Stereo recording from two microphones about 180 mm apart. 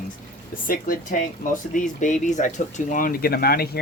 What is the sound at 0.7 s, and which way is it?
Speech, 50° left (ahead or behind).